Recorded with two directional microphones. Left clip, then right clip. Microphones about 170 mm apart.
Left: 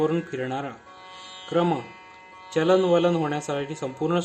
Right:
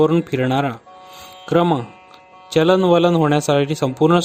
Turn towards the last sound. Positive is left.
turn(degrees=-60)  # may be behind; listen again after turning